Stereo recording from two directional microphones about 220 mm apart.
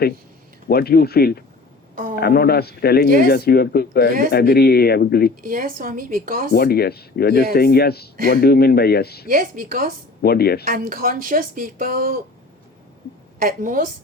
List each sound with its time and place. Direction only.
0.7 s speech: 45° left (ahead or behind)
5.4 s speech: 40° right (ahead or behind)
6.5 s speech: 45° left (ahead or behind)
9.2 s speech: 40° right (ahead or behind)
10.2 s speech: 45° left (ahead or behind)
10.7 s speech: 40° right (ahead or behind)
13.4 s speech: 40° right (ahead or behind)